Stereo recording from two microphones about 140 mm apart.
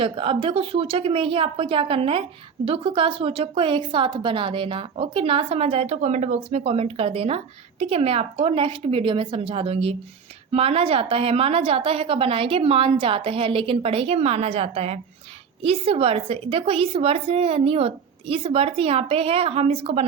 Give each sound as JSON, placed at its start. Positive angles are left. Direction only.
{"t": 0.0, "sound": "a woman's voice", "side_deg": -40}